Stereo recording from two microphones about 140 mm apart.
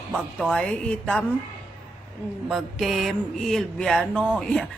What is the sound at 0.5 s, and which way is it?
Speech, 5° left (ahead or behind).